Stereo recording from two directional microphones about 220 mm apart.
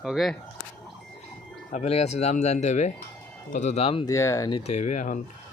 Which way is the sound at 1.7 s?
30° left (ahead or behind).